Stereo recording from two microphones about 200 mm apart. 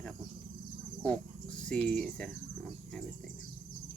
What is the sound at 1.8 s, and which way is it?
Speech, 5° left (ahead or behind).